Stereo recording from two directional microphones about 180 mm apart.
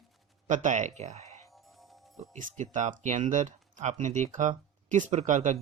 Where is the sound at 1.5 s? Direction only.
Centre (ahead or behind).